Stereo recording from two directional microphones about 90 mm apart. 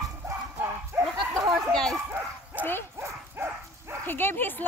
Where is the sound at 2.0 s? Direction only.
20° right (ahead or behind).